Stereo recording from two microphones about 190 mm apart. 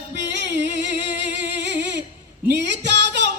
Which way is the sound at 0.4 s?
65° right (ahead or behind).